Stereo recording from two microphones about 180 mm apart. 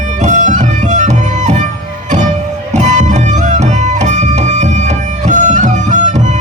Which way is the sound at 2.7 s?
40° right (ahead or behind).